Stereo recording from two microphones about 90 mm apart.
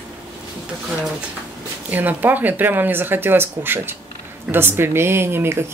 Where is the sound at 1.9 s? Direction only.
20° right (ahead or behind).